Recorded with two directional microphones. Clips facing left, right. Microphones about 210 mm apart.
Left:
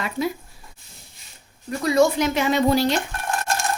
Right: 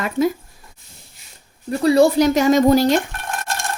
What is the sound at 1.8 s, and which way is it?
A woman's voice, 35° right (ahead or behind).